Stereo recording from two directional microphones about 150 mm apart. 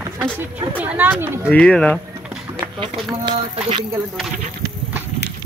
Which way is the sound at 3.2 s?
35° right (ahead or behind).